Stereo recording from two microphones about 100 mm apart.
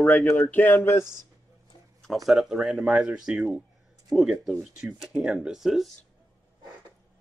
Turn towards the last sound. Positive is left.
turn(degrees=-5)  # may be behind; listen again after turning